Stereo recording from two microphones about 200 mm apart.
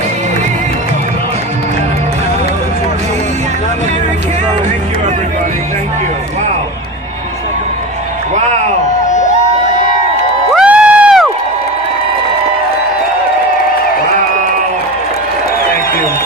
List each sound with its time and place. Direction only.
10.5 s crowd: 5° right (ahead or behind)